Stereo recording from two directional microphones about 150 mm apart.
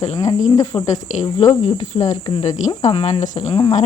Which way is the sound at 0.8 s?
50° left (ahead or behind).